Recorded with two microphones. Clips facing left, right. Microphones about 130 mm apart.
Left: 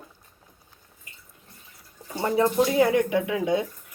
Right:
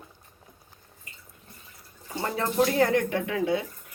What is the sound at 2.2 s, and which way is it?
Speech, 15° left (ahead or behind).